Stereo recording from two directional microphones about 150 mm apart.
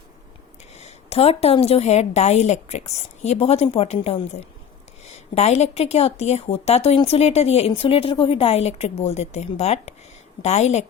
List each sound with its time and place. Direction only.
0.7 s a woman's voice: 45° left (ahead or behind)